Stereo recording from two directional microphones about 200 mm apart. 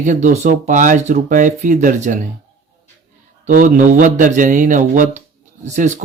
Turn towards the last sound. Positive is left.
turn(degrees=-35)  # may be behind; listen again after turning